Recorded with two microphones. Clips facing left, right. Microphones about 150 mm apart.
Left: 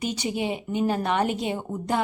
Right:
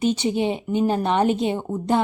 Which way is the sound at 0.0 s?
25° right (ahead or behind).